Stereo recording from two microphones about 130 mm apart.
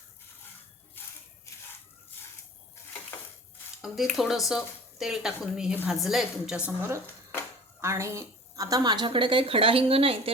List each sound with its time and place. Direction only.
3.8 s speech: centre (ahead or behind)
7.8 s a woman's voice: 20° right (ahead or behind); by 10.3 s 45° right (ahead or behind)